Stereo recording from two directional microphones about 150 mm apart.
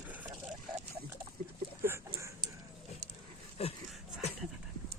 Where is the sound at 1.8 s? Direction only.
15° right (ahead or behind).